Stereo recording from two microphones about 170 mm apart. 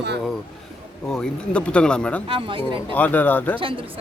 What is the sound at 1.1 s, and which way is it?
Speech, 5° left (ahead or behind).